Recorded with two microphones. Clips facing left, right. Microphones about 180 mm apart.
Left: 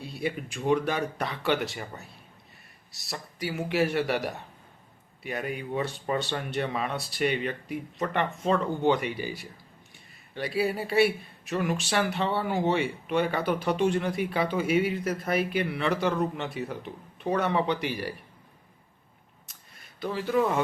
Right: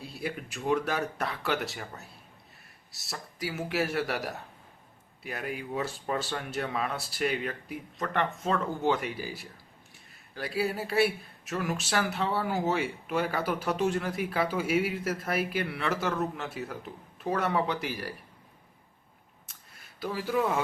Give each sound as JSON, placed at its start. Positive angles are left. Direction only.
{"t": 0.0, "sound": "speech", "side_deg": 0}
{"t": 20.0, "sound": "speech", "side_deg": -5}